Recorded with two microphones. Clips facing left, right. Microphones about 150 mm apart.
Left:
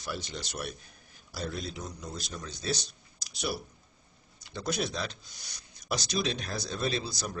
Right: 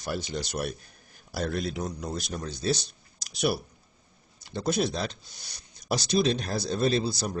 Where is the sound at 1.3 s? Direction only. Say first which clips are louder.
Right 7 dB; 65° right (ahead or behind).